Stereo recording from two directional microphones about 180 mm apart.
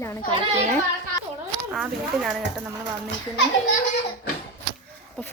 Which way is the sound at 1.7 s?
Centre (ahead or behind).